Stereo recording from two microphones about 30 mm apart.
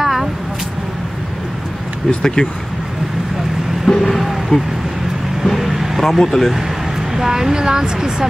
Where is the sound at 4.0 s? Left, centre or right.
Centre.